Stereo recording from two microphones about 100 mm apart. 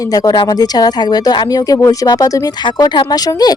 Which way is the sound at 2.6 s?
45° left (ahead or behind).